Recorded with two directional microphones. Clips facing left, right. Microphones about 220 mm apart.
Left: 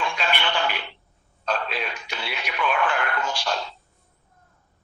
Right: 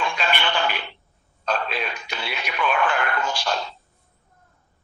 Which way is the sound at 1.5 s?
50° right (ahead or behind).